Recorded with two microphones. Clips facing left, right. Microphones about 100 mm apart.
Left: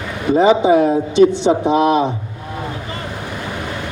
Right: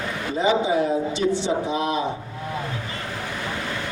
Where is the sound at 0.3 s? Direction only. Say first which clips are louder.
Left 9 dB; 65° left (ahead or behind).